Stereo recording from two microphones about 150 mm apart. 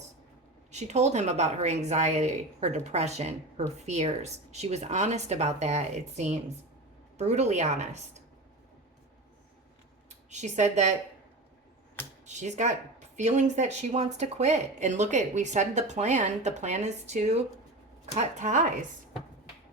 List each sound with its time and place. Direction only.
0.7 s speech: 50° right (ahead or behind)
10.1 s speech: 50° right (ahead or behind)
12.2 s speech: 50° right (ahead or behind)